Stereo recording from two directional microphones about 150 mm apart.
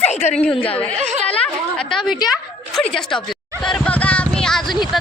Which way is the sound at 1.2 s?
10° left (ahead or behind).